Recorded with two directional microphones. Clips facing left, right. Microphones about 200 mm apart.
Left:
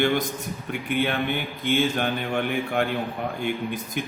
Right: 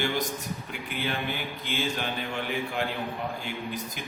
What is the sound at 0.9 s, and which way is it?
Mantra, 60° left (ahead or behind).